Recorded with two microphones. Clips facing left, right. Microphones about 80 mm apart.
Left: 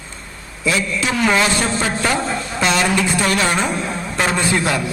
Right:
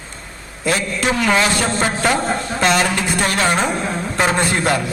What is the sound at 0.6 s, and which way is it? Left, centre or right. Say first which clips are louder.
A woman's voice: right 1 dB; right.